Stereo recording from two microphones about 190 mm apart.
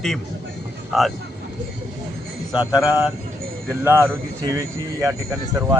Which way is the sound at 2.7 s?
20° left (ahead or behind).